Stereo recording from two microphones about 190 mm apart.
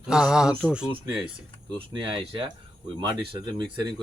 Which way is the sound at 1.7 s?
25° right (ahead or behind).